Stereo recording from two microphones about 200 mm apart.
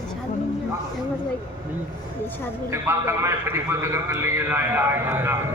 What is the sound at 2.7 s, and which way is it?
A man's voice, 15° right (ahead or behind).